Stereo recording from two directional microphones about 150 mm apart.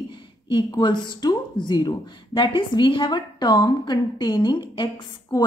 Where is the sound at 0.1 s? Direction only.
30° left (ahead or behind).